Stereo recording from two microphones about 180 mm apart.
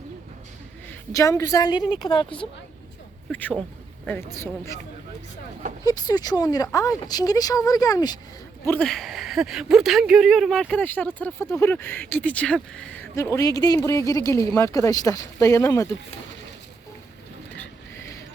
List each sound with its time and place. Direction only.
1.1 s speech: 15° left (ahead or behind)
3.2 s speech: 5° left (ahead or behind)
5.8 s speech: 20° left (ahead or behind)
8.6 s speech: 5° left (ahead or behind)
13.1 s speech: 15° left (ahead or behind)